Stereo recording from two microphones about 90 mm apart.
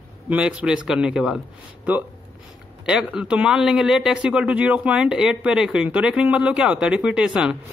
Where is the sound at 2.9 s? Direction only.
10° right (ahead or behind).